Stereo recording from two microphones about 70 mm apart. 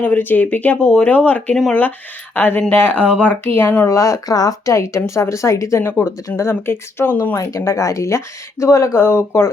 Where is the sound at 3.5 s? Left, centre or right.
Left.